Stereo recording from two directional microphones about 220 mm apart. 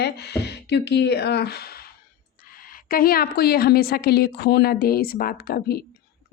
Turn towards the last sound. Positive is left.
turn(degrees=45)  # may be behind; listen again after turning